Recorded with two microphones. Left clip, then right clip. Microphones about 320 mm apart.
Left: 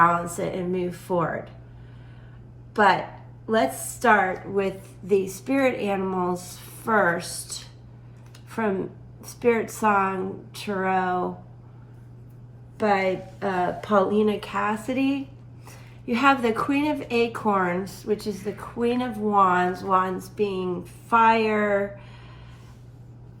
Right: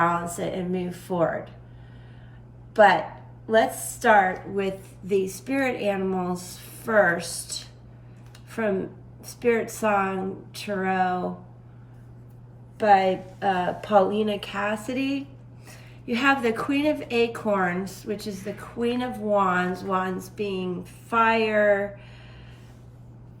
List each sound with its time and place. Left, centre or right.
0.0 s speech: centre
4.0 s speech: centre
8.4 s a sound: centre
9.2 s speech: centre
12.7 s speech: centre